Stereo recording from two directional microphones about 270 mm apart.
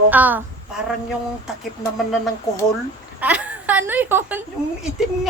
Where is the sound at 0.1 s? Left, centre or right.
Centre.